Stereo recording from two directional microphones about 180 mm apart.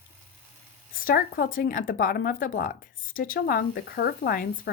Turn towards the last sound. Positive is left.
turn(degrees=55)  # may be behind; listen again after turning